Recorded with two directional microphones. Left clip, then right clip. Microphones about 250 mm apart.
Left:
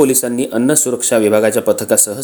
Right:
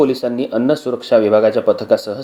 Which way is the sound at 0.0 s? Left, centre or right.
Left.